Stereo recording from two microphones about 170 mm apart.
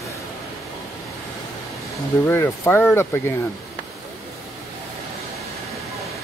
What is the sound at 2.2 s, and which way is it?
Speech, 15° left (ahead or behind).